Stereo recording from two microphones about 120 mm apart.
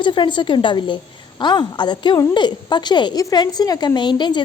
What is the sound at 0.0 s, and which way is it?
A woman's voice, 40° left (ahead or behind).